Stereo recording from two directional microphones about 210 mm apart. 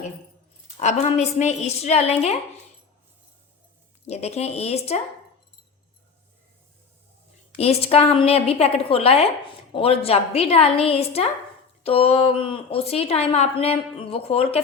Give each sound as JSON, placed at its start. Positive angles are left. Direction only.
{"t": 0.8, "sound": "a woman's voice", "side_deg": 35}
{"t": 4.0, "sound": "a woman's voice", "side_deg": 30}
{"t": 7.6, "sound": "a woman's voice", "side_deg": 30}